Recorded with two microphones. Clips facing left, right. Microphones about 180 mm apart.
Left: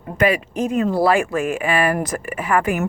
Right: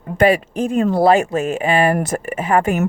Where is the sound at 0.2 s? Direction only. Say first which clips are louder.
Right 4 dB; 30° right (ahead or behind).